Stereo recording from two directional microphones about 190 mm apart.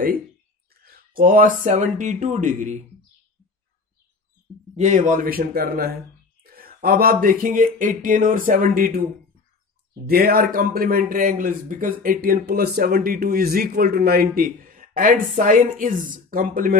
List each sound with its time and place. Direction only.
0.8 s speech: 50° right (ahead or behind)
4.7 s speech: 40° right (ahead or behind)
10.0 s speech: 50° right (ahead or behind)